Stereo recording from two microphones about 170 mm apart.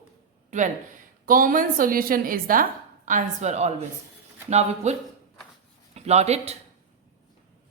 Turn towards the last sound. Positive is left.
turn(degrees=-40)  # may be behind; listen again after turning